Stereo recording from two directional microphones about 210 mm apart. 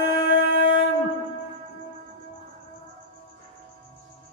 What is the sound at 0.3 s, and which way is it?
Dog, 55° left (ahead or behind).